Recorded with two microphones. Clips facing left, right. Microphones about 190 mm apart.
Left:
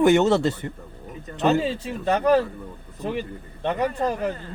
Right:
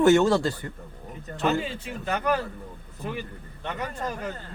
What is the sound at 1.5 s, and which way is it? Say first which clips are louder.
A man's voice: left 5 dB; 35° left (ahead or behind).